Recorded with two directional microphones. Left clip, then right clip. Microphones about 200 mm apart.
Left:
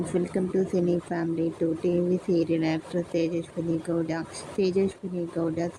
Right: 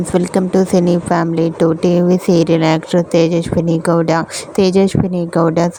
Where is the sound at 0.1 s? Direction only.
50° right (ahead or behind).